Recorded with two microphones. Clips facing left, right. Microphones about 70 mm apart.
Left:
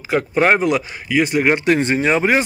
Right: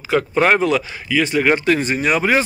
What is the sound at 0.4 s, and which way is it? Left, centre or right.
Speech, centre.